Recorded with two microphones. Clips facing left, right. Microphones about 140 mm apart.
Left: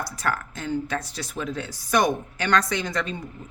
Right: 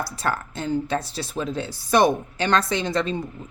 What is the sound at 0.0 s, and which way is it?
Speech, 30° right (ahead or behind).